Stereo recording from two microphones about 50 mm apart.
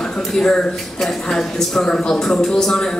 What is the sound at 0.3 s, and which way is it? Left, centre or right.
Speech, centre.